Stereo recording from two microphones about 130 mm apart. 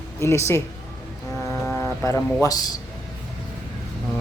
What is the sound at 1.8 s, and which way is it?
Livestock, 20° left (ahead or behind).